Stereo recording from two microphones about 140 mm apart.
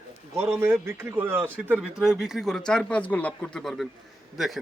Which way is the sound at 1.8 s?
Centre (ahead or behind).